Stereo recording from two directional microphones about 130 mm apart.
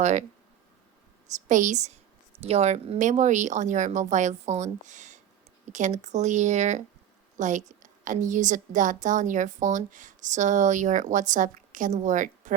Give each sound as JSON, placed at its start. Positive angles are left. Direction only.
{"t": 0.0, "sound": "speech", "side_deg": -65}
{"t": 1.5, "sound": "a woman's voice", "side_deg": -75}
{"t": 2.4, "sound": "a woman's voice", "side_deg": -55}
{"t": 3.0, "sound": "a woman's voice", "side_deg": -70}